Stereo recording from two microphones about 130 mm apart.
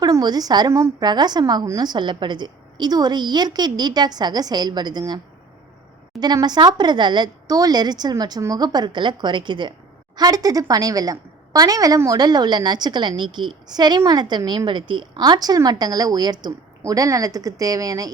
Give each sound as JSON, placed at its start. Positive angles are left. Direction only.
{"t": 0.0, "sound": "a woman's voice", "side_deg": -30}